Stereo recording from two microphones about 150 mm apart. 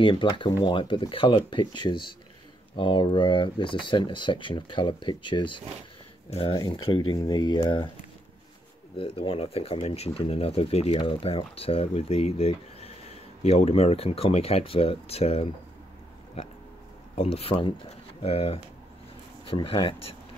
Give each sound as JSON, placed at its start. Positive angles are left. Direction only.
{"t": 0.0, "sound": "speech", "side_deg": 30}
{"t": 6.5, "sound": "speech", "side_deg": 30}
{"t": 8.9, "sound": "speech", "side_deg": 35}
{"t": 17.1, "sound": "speech", "side_deg": 40}